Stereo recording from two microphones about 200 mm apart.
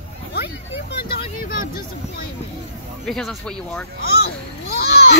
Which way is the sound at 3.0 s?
Centre (ahead or behind).